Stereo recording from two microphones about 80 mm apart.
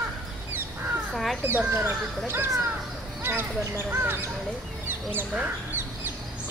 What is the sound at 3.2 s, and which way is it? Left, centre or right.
Speech, right.